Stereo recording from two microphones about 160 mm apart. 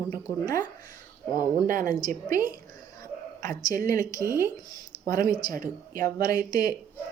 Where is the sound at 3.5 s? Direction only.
20° left (ahead or behind).